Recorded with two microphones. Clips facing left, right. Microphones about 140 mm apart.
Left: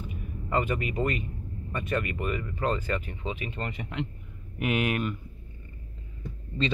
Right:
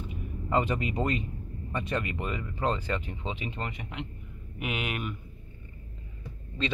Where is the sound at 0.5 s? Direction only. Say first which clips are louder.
Even; 25° right (ahead or behind).